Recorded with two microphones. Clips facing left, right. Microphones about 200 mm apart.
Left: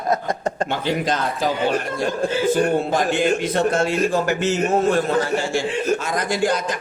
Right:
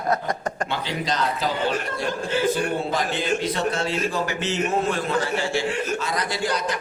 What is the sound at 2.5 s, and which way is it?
A man's voice, 45° left (ahead or behind).